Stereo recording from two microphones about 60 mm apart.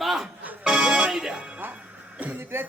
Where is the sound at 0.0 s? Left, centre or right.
Centre.